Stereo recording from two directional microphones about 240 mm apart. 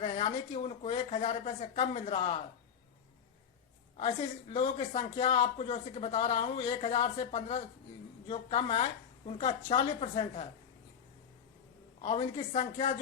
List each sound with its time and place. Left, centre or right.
0.0 s speech: left
3.9 s speech: left
12.0 s speech: left